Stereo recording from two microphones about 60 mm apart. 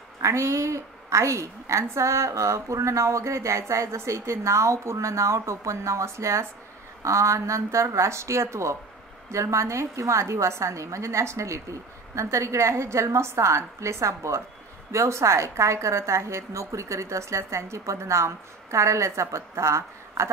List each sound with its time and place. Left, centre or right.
0.2 s a woman's voice: right